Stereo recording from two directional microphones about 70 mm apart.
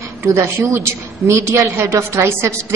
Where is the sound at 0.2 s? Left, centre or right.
Right.